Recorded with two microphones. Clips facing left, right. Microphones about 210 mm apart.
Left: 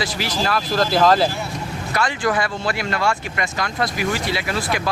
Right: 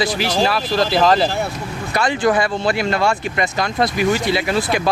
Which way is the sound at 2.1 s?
30° right (ahead or behind).